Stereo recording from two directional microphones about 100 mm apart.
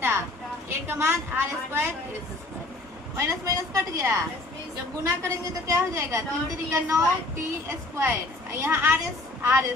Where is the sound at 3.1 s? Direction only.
30° right (ahead or behind).